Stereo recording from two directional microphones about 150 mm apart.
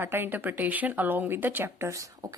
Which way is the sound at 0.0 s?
15° right (ahead or behind).